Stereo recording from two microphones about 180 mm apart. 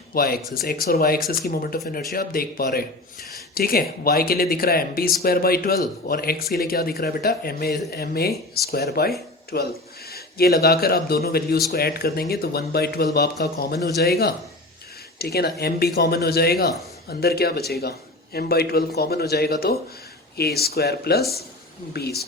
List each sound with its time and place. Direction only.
0.1 s speech: 55° left (ahead or behind)